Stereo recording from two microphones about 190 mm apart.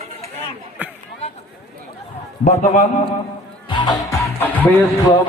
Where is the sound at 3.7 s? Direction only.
25° left (ahead or behind).